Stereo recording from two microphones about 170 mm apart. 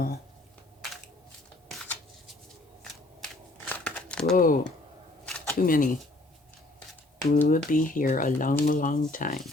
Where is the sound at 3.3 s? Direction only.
10° left (ahead or behind).